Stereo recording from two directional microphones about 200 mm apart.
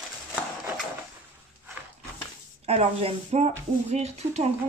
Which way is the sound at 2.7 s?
30° right (ahead or behind).